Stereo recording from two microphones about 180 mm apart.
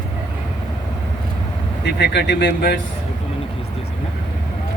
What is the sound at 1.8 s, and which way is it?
Speech, 70° left (ahead or behind).